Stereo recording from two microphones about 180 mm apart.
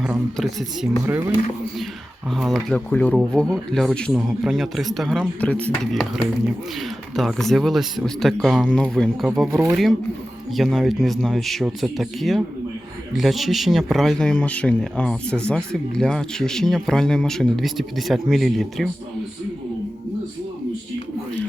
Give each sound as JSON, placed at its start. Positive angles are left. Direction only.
{"t": 0.0, "sound": "speech", "side_deg": -5}
{"t": 9.5, "sound": "speech", "side_deg": -15}
{"t": 10.5, "sound": "speech", "side_deg": 0}